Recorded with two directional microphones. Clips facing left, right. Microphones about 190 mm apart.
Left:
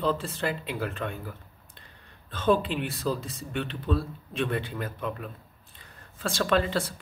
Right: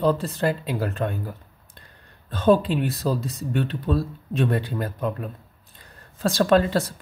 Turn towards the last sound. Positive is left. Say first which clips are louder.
# right 6 dB
turn(degrees=-40)  # may be behind; listen again after turning